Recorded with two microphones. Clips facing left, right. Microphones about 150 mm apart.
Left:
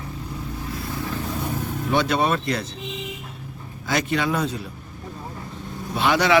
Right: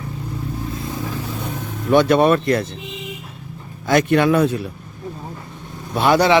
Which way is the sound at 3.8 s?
55° right (ahead or behind).